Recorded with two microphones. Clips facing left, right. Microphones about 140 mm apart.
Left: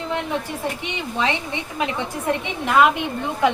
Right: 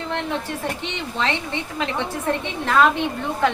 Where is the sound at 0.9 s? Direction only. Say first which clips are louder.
Left 2 dB; 10° left (ahead or behind).